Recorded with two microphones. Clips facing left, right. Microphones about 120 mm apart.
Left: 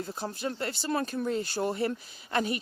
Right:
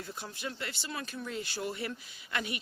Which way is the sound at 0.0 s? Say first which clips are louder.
Left 7 dB; 35° left (ahead or behind).